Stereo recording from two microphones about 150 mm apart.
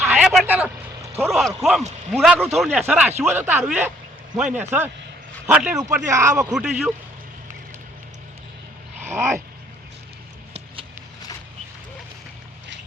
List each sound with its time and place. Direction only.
0.0 s vehicle: 5° right (ahead or behind)
1.3 s speech: centre (ahead or behind)
5.9 s speech: 20° right (ahead or behind)
6.5 s speech: 5° right (ahead or behind)
9.0 s a sound: 15° right (ahead or behind)